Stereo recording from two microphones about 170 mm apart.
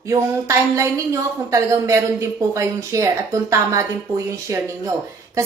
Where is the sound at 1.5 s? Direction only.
15° right (ahead or behind).